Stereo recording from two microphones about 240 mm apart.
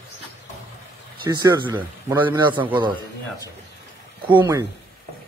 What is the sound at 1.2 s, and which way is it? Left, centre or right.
Speech, centre.